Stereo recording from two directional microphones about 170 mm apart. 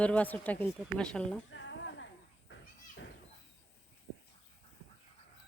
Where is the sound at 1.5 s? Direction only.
90° left.